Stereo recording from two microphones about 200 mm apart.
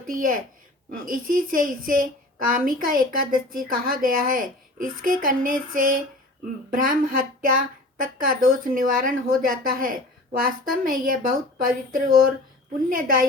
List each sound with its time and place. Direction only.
0.1 s a woman's voice: 45° right (ahead or behind)